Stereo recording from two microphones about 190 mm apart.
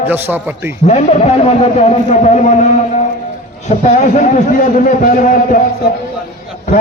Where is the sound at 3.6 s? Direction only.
40° left (ahead or behind).